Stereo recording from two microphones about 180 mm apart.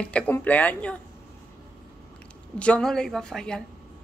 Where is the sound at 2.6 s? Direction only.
5° left (ahead or behind).